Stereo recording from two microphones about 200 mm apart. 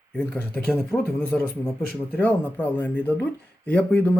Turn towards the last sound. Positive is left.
turn(degrees=10)  # may be behind; listen again after turning